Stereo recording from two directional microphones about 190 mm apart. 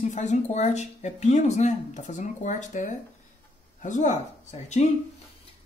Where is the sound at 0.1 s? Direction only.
40° left (ahead or behind).